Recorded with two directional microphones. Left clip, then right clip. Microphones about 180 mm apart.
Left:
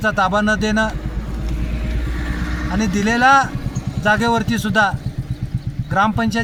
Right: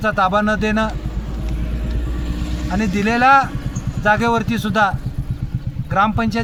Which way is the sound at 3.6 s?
65° left (ahead or behind).